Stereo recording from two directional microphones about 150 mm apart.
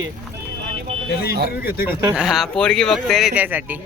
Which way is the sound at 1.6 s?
90° left.